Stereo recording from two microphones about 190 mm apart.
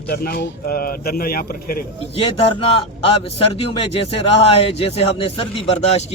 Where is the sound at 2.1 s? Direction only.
30° left (ahead or behind).